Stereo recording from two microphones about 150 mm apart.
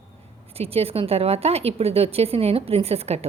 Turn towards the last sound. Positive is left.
turn(degrees=-45)  # may be behind; listen again after turning